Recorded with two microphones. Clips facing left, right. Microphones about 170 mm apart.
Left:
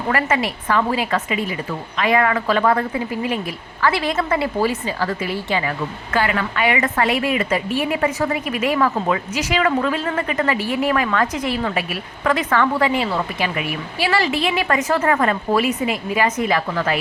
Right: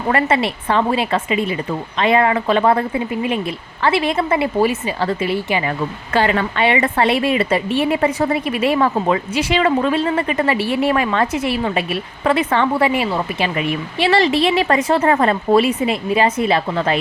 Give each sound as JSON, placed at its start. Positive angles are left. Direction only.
{"t": 0.1, "sound": "a woman's voice", "side_deg": -30}
{"t": 6.1, "sound": "a woman's voice", "side_deg": -30}
{"t": 14.4, "sound": "a woman's voice", "side_deg": -35}